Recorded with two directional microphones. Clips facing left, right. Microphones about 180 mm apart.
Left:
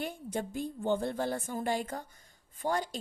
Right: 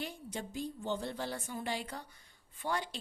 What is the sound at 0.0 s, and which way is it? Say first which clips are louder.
Speech: left 6 dB; 50° left (ahead or behind).